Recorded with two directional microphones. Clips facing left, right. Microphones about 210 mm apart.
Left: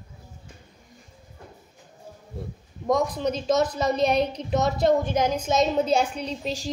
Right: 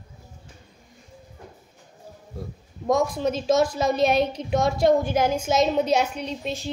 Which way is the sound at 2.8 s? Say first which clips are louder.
Right 1 dB; 5° right (ahead or behind).